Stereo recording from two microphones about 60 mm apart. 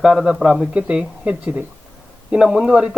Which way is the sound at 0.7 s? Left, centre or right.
Right.